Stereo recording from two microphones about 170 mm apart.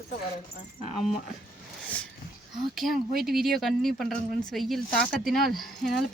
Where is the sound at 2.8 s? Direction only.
Centre (ahead or behind).